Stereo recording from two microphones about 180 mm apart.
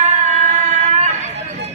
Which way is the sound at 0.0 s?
40° right (ahead or behind).